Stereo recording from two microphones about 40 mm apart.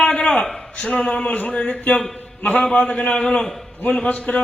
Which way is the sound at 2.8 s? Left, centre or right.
Left.